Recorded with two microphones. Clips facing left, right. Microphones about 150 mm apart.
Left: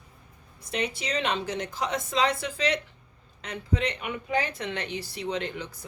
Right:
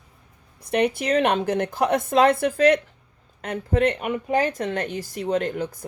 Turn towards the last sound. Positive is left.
turn(degrees=-50)  # may be behind; listen again after turning